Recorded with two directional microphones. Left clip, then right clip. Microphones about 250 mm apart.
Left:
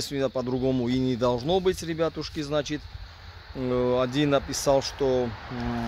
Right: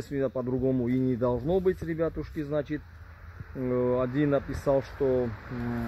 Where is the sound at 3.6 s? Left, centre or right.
Left.